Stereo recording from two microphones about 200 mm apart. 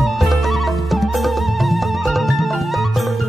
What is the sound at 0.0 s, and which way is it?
Music, centre (ahead or behind).